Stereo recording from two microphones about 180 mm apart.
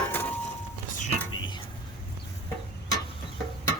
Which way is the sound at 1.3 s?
25° left (ahead or behind).